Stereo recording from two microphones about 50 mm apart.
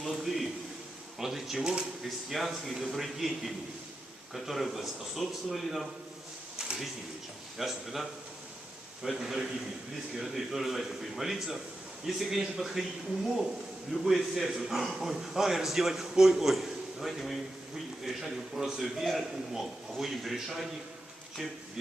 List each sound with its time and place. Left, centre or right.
0.0 s a sound: centre
1.2 s a man's voice: centre
2.0 s a man's voice: centre
7.6 s a man's voice: centre
9.0 s a man's voice: centre
13.9 s a man's voice: centre